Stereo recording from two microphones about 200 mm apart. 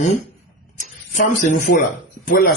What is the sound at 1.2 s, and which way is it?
Speech, 40° left (ahead or behind).